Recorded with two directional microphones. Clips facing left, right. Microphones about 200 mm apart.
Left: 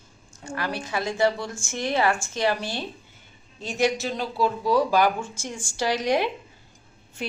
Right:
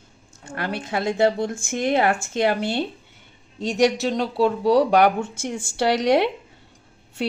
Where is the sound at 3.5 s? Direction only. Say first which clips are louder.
Right 5 dB; 70° right (ahead or behind).